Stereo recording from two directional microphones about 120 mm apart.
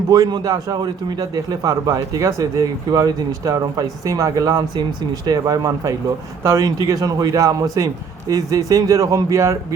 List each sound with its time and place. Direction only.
0.1 s speech: 35° right (ahead or behind)